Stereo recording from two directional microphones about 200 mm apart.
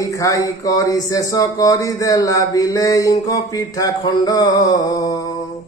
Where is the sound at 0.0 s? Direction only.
15° left (ahead or behind).